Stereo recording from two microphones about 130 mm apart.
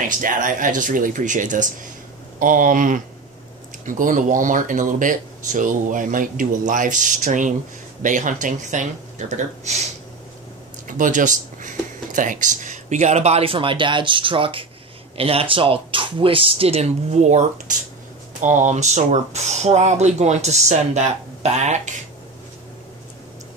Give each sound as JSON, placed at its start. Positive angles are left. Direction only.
{"t": 0.2, "sound": "speech", "side_deg": -90}
{"t": 2.3, "sound": "speech", "side_deg": -90}
{"t": 9.3, "sound": "speech", "side_deg": -60}
{"t": 10.9, "sound": "speech", "side_deg": -80}